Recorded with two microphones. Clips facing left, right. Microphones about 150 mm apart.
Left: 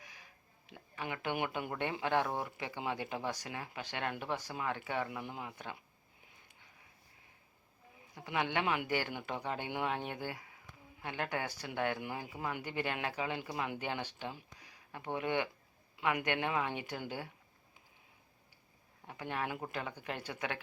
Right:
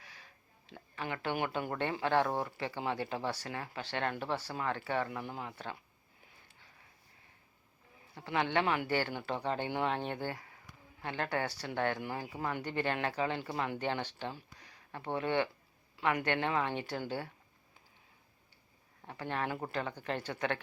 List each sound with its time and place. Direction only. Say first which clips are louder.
0.0 s a sound: even; 15° left (ahead or behind)
0.7 s speech: right 2 dB; 15° left (ahead or behind)
8.1 s speech: right 3 dB; 15° left (ahead or behind)
19.0 s speech: right 2 dB; 10° left (ahead or behind)